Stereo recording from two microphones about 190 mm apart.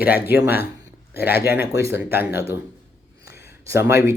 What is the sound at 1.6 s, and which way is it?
Speech, 15° right (ahead or behind).